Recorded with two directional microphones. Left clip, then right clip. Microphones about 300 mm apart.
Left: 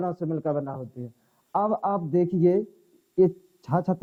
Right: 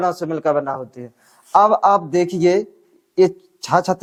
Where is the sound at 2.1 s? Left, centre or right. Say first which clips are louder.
Right 6 dB; centre.